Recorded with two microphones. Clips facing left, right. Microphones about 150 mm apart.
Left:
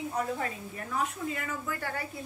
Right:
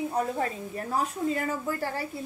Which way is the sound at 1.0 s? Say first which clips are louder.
Right 5 dB; 35° right (ahead or behind).